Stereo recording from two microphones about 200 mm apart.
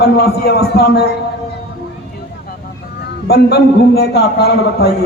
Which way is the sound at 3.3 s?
55° left (ahead or behind).